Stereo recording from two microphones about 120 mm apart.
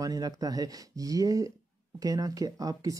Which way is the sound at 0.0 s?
30° right (ahead or behind).